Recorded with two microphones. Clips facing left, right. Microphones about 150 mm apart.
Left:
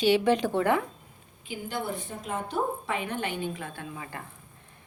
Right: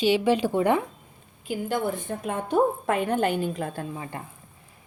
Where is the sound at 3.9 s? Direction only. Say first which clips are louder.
Right 4 dB; 25° right (ahead or behind).